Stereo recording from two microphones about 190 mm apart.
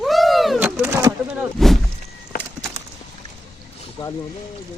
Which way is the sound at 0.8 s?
15° right (ahead or behind).